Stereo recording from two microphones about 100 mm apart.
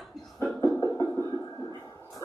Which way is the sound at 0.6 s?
35° left (ahead or behind).